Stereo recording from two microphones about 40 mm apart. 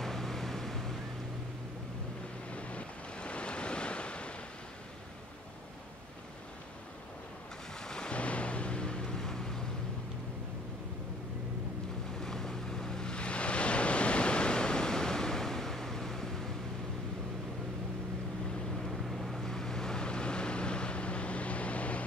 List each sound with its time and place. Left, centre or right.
0.0 s vehicle: centre
2.5 s waves: left
7.8 s a sound: centre
8.1 s a sound: left; by 9.6 s centre
12.2 s waves: centre
18.9 s boat: centre
19.4 s vehicle: centre; by 22.0 s left